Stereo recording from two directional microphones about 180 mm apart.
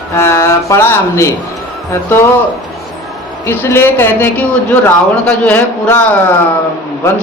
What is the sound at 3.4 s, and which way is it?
A man's voice, 10° left (ahead or behind).